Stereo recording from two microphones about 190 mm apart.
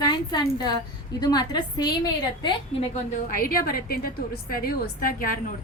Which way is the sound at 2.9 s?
45° left (ahead or behind).